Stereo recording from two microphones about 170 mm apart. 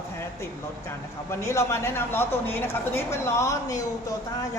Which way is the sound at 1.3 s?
15° left (ahead or behind).